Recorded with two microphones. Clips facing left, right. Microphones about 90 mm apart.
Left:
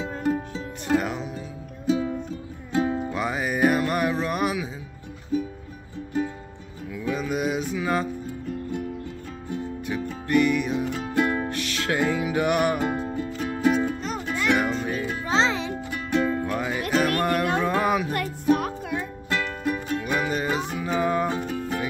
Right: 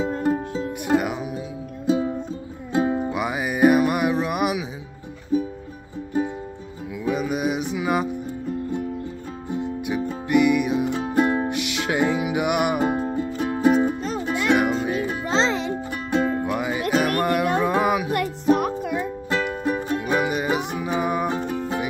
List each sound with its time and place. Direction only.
0.2 s music: 30° right (ahead or behind)
0.8 s music: 10° right (ahead or behind)
1.9 s music: 25° right (ahead or behind)
7.0 s music: 15° right (ahead or behind)
9.5 s music: 15° right (ahead or behind)
10.9 s music: 25° right (ahead or behind)
14.3 s music: 15° right (ahead or behind)
15.7 s music: 30° right (ahead or behind)
16.4 s music: 10° right (ahead or behind)
19.3 s music: 20° right (ahead or behind)
21.4 s music: 30° right (ahead or behind)